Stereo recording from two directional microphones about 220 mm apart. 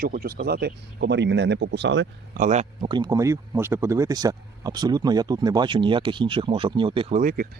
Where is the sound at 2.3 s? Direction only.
35° right (ahead or behind).